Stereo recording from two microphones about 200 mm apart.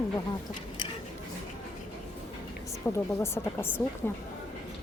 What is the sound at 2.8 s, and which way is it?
A woman's voice, 15° left (ahead or behind).